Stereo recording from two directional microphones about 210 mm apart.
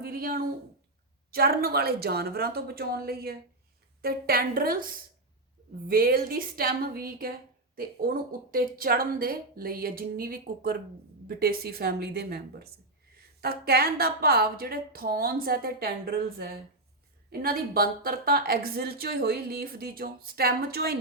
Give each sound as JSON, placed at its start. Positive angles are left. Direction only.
{"t": 0.0, "sound": "a woman's voice", "side_deg": -45}